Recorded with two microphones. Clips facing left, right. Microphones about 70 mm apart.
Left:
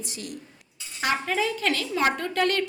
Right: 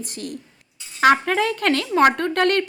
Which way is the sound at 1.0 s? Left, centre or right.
Right.